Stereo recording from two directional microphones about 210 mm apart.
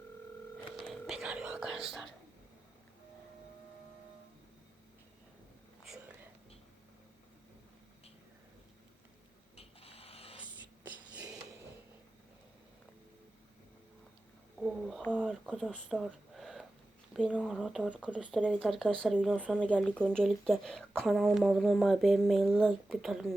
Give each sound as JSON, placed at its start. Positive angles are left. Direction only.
{"t": 0.8, "sound": "whispering", "side_deg": 0}
{"t": 9.6, "sound": "printer", "side_deg": 30}
{"t": 14.6, "sound": "speech", "side_deg": 0}